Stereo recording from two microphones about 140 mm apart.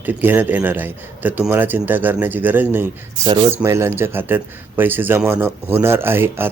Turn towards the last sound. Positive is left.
turn(degrees=-15)  # may be behind; listen again after turning